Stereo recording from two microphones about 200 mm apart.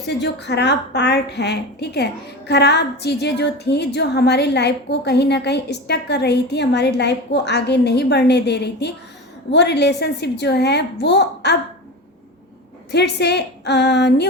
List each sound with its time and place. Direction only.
0.0 s a woman's voice: 60° left (ahead or behind)
12.9 s a woman's voice: 55° left (ahead or behind)